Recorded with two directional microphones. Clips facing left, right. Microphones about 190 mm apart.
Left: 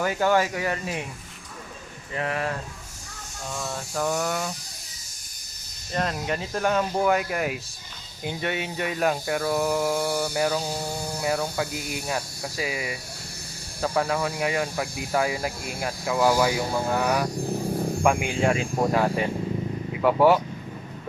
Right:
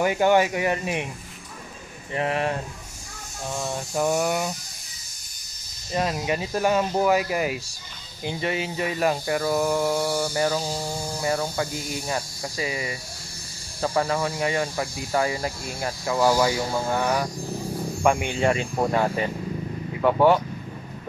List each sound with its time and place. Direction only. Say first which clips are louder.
0.0 s speech: right 3 dB; 20° right (ahead or behind)
2.1 s speech: right 3 dB; 25° right (ahead or behind)
3.5 s speech: right 3 dB; 20° right (ahead or behind)
5.9 s speech: right 2 dB; 5° right (ahead or behind)